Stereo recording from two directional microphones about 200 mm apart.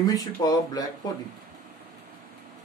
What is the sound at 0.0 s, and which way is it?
Speech, 20° left (ahead or behind).